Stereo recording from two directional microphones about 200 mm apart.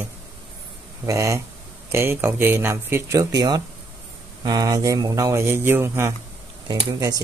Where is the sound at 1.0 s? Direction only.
15° right (ahead or behind).